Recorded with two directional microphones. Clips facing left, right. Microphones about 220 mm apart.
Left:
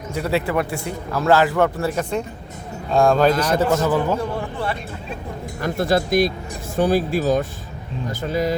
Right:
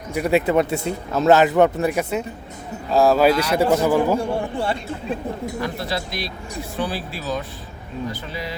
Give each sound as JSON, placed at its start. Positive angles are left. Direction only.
{"t": 0.1, "sound": "a man's voice", "side_deg": -15}
{"t": 4.2, "sound": "speech", "side_deg": -30}
{"t": 5.5, "sound": "speech", "side_deg": 50}